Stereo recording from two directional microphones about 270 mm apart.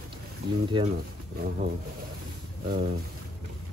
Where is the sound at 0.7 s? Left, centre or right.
Centre.